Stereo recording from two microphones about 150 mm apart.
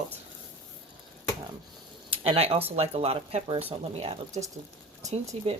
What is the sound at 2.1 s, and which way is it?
Speech, 40° right (ahead or behind).